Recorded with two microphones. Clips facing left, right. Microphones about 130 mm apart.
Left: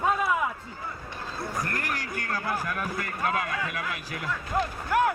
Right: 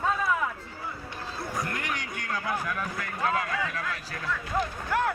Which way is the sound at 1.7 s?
Centre (ahead or behind).